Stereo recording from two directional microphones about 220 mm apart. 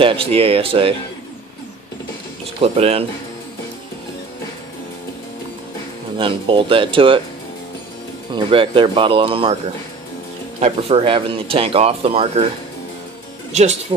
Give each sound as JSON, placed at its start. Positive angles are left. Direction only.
{"t": 0.0, "sound": "speech", "side_deg": -25}
{"t": 2.6, "sound": "speech", "side_deg": -25}
{"t": 6.1, "sound": "speech", "side_deg": -25}
{"t": 8.5, "sound": "speech", "side_deg": -25}
{"t": 10.6, "sound": "speech", "side_deg": -25}
{"t": 13.5, "sound": "speech", "side_deg": -30}